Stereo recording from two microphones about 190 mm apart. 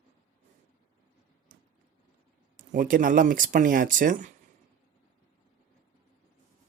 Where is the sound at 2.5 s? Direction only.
45° right (ahead or behind).